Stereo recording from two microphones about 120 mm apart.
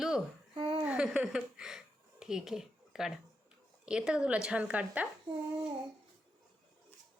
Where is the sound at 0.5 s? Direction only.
45° right (ahead or behind).